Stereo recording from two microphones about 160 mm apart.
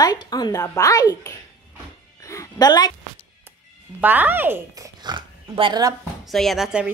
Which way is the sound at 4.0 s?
10° right (ahead or behind).